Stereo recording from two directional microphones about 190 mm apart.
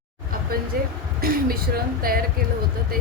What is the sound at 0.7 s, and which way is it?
Speech, 50° right (ahead or behind).